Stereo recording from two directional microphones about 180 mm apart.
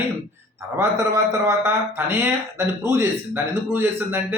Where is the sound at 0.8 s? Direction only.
15° right (ahead or behind).